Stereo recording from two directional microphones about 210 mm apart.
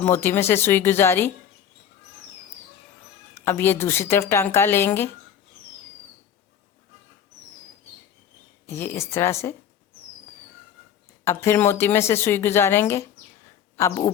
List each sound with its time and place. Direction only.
0.0 s speech: 10° left (ahead or behind)
3.4 s speech: 10° left (ahead or behind)
8.6 s speech: 10° left (ahead or behind)
11.3 s speech: 10° left (ahead or behind)